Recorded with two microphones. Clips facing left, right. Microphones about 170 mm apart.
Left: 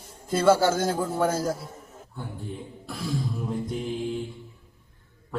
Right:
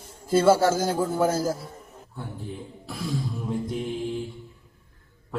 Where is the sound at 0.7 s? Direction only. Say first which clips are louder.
Right 1 dB; 30° right (ahead or behind).